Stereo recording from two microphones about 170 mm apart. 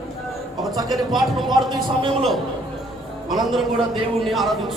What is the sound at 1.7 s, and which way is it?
Speech, 25° right (ahead or behind).